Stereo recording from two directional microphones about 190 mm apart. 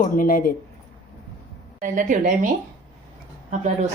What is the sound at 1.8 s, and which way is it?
Speech, 45° right (ahead or behind).